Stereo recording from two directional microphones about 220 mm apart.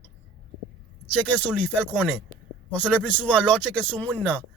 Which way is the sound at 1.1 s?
5° left (ahead or behind).